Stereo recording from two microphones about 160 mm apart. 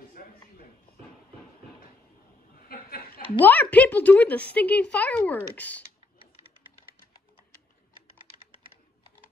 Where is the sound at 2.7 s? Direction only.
70° left (ahead or behind).